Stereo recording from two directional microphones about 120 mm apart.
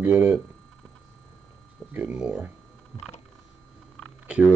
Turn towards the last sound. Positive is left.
turn(degrees=-10)  # may be behind; listen again after turning